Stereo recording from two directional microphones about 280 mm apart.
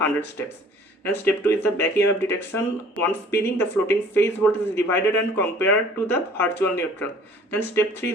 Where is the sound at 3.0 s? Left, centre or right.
Right.